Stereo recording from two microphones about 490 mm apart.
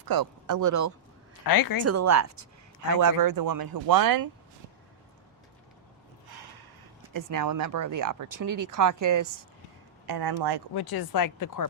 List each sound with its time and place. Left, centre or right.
0.0 s speech: right
1.5 s speech: left
1.8 s speech: right
7.1 s speech: right
10.1 s speech: right
10.8 s speech: left